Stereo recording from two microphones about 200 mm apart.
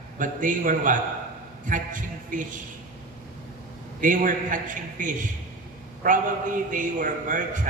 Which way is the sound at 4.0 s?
40° right (ahead or behind).